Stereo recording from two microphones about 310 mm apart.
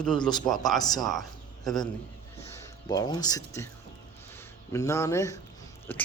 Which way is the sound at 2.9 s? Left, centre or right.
Centre.